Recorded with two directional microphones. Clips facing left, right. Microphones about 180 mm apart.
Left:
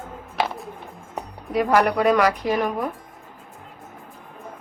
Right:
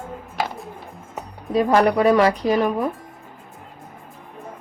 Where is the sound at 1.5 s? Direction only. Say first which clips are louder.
Right 2 dB; 30° right (ahead or behind).